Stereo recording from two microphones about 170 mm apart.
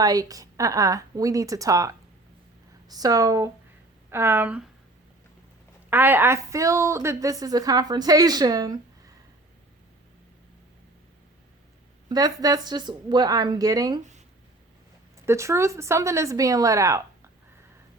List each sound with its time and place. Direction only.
0.0 s a woman's voice: 20° right (ahead or behind)
5.9 s a woman's voice: 10° right (ahead or behind)
12.0 s a woman's voice: 20° right (ahead or behind)
15.3 s speech: 15° right (ahead or behind)